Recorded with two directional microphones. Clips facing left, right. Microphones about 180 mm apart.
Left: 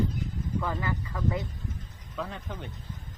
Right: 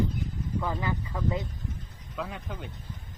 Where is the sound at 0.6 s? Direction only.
15° right (ahead or behind).